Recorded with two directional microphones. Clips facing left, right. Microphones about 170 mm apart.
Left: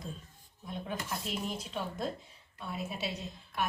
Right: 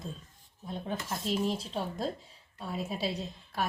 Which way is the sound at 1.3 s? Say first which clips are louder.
Right 11 dB; 30° right (ahead or behind).